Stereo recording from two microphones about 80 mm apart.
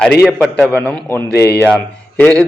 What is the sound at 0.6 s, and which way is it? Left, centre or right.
A man's voice, centre.